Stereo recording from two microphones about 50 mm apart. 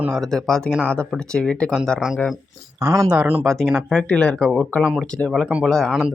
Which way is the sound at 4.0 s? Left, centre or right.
Centre.